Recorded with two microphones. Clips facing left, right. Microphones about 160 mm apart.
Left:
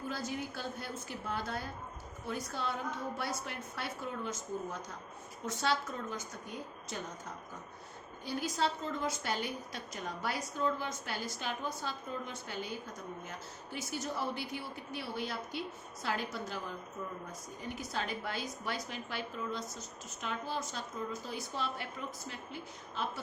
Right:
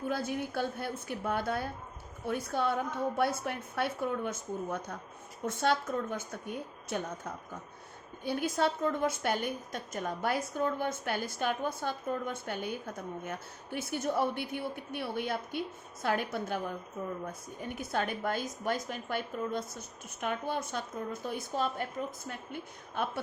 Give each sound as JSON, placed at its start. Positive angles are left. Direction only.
{"t": 0.1, "sound": "a woman's voice", "side_deg": -55}